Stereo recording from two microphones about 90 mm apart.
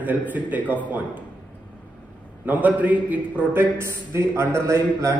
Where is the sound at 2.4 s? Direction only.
20° right (ahead or behind).